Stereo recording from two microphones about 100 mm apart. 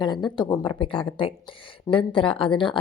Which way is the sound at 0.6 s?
60° left (ahead or behind).